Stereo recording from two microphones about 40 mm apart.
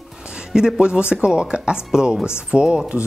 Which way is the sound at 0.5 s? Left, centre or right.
Centre.